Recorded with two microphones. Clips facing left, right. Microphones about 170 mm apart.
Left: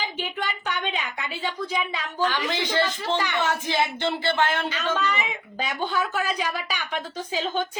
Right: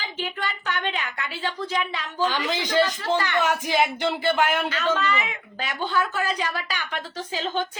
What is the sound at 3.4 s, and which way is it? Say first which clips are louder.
Speech: right 2 dB; 15° right (ahead or behind).